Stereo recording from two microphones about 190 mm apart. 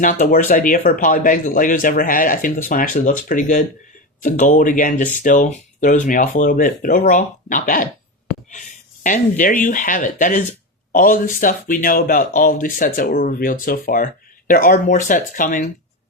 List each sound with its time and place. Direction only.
0.0 s speech: 45° left (ahead or behind)
9.0 s speech: 45° left (ahead or behind)